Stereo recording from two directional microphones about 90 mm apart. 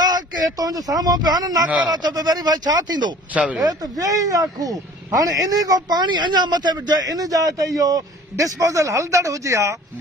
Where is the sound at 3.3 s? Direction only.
15° right (ahead or behind).